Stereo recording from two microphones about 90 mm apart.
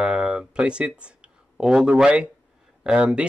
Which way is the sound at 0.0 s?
10° right (ahead or behind).